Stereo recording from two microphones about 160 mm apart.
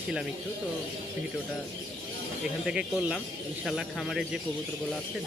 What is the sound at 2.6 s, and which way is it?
Speech, 5° right (ahead or behind).